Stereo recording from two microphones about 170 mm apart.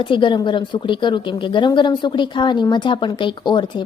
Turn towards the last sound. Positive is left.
turn(degrees=25)  # may be behind; listen again after turning